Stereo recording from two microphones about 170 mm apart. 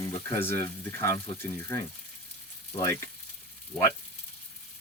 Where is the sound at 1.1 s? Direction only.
35° left (ahead or behind).